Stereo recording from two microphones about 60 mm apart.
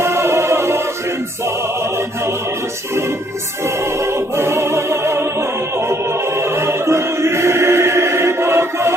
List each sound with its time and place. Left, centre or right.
0.0 s music: right
4.0 s music: right